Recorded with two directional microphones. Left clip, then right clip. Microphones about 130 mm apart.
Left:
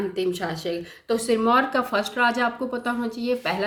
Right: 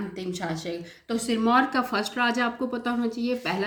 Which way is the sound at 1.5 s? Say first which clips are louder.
Even; 20° left (ahead or behind).